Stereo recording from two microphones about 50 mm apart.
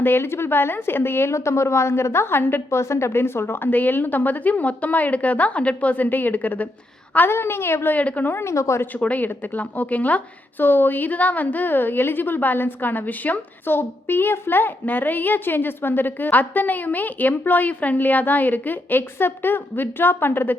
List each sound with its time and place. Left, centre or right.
0.0 s a woman's voice: left
2.6 s a child's voice: left
7.3 s a woman's voice: left
7.9 s a child's voice: left
8.3 s a woman's voice: left
9.0 s a child's voice: left
13.7 s a child's voice: left